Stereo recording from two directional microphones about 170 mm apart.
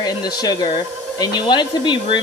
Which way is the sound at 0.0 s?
25° left (ahead or behind).